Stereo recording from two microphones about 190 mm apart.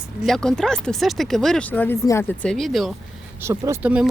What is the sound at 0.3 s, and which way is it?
Speech, 5° left (ahead or behind).